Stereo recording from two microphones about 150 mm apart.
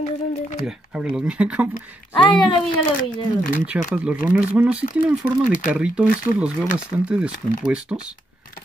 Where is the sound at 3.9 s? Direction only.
10° right (ahead or behind).